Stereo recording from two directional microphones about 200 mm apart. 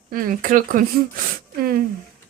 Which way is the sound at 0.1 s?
45° right (ahead or behind).